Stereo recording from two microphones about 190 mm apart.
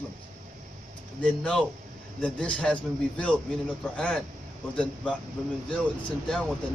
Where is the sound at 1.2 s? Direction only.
5° left (ahead or behind).